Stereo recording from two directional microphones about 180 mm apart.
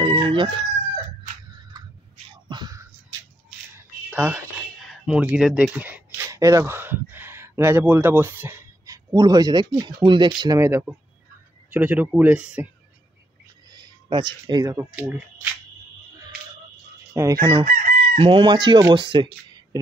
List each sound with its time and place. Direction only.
0.0 s crowing: 25° right (ahead or behind)
2.4 s a sound: 25° right (ahead or behind)
3.7 s a sound: 10° right (ahead or behind)
5.0 s speech: 5° right (ahead or behind)
13.7 s speech: 25° right (ahead or behind)
15.0 s speech: 5° right (ahead or behind)
17.1 s speech: 20° right (ahead or behind)
17.6 s chicken: 50° right (ahead or behind)
18.1 s speech: 30° right (ahead or behind)